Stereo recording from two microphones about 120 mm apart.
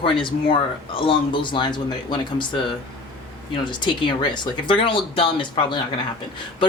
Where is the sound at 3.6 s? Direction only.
40° left (ahead or behind).